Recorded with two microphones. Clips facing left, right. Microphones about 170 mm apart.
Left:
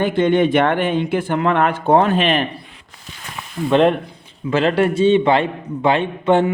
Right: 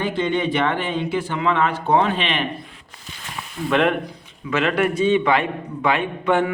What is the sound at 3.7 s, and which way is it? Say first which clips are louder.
A man's voice: left 5 dB; 30° left (ahead or behind).